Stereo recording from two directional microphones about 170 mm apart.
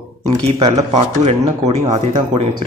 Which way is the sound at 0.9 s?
40° right (ahead or behind).